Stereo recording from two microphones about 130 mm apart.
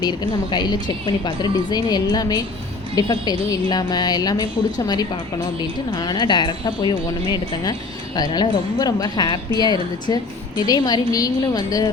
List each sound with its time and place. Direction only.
0.0 s speech: 35° left (ahead or behind)
5.9 s a woman's voice: 35° left (ahead or behind)